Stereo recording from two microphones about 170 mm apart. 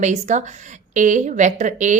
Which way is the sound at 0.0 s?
45° right (ahead or behind).